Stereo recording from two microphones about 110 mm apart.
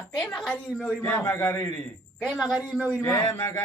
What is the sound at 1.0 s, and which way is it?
Speech, 20° left (ahead or behind).